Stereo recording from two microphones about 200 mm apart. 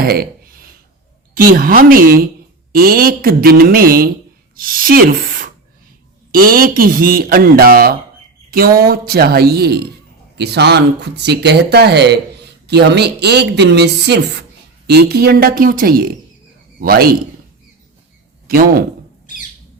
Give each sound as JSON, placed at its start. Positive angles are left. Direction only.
{"t": 0.0, "sound": "a sound", "side_deg": -50}
{"t": 1.3, "sound": "a man's voice", "side_deg": -45}
{"t": 18.4, "sound": "a man's voice", "side_deg": -45}